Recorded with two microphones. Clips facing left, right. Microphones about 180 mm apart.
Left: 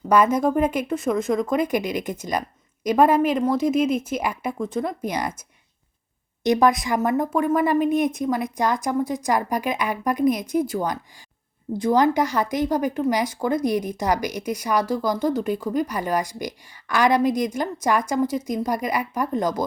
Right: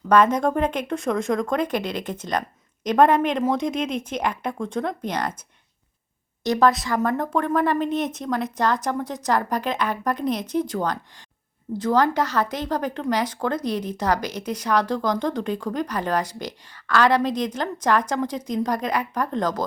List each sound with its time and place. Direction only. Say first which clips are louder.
0.1 s speech: even; 10° left (ahead or behind)
6.4 s speech: left 1 dB; 15° left (ahead or behind)